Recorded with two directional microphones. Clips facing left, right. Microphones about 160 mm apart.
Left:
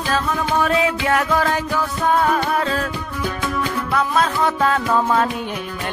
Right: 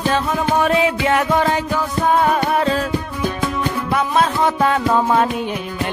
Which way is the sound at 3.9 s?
25° right (ahead or behind).